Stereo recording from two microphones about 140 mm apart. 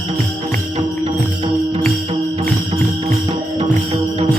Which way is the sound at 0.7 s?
45° right (ahead or behind).